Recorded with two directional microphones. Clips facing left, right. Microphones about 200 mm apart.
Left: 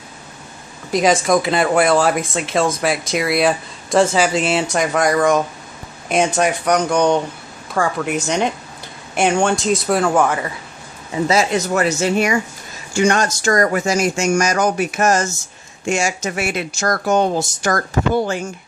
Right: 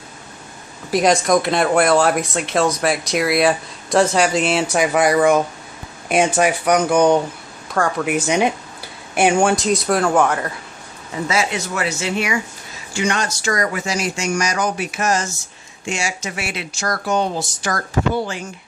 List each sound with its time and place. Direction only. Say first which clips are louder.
0.9 s speech: even; centre (ahead or behind)
8.1 s a woman's voice: right 2 dB; 10° right (ahead or behind)
11.2 s speech: left 5 dB; 40° left (ahead or behind)